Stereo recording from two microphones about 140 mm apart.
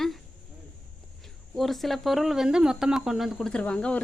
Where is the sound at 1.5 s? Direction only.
Centre (ahead or behind).